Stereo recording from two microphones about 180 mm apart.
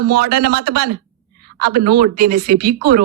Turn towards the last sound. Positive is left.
turn(degrees=-55)  # may be behind; listen again after turning